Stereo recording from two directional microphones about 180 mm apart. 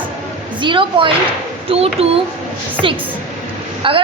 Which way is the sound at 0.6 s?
25° right (ahead or behind).